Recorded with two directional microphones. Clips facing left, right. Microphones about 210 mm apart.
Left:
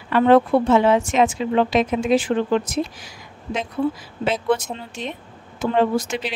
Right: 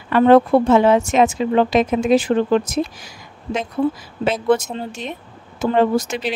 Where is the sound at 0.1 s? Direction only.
45° right (ahead or behind).